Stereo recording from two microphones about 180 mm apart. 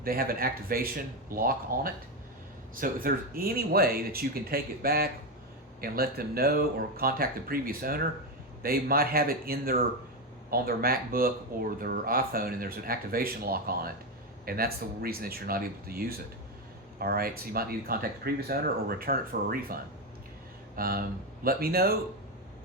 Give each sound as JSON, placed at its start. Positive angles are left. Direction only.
{"t": 0.0, "sound": "speech", "side_deg": -55}